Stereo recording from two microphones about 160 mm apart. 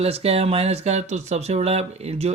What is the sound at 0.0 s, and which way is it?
Speech, 40° right (ahead or behind).